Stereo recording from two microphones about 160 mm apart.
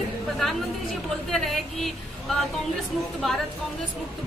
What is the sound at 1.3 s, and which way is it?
A woman's voice, centre (ahead or behind).